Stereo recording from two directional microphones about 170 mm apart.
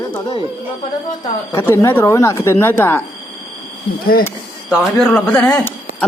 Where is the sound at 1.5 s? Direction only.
15° left (ahead or behind).